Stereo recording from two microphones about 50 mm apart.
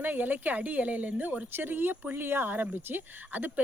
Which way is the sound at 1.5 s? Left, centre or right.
Right.